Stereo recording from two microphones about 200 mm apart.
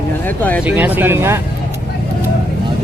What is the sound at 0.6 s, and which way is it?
Speech, 5° right (ahead or behind).